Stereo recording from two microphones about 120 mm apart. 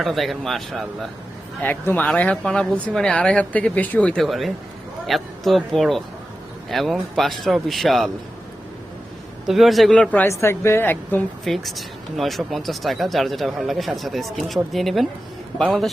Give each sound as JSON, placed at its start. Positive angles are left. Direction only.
{"t": 0.0, "sound": "speech", "side_deg": 0}
{"t": 1.6, "sound": "speech", "side_deg": 15}
{"t": 9.5, "sound": "speech", "side_deg": 0}
{"t": 9.9, "sound": "speech", "side_deg": 10}
{"t": 10.2, "sound": "speech", "side_deg": 20}
{"t": 11.4, "sound": "speech", "side_deg": 0}